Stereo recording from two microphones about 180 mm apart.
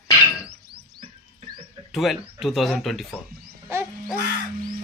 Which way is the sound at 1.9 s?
Centre (ahead or behind).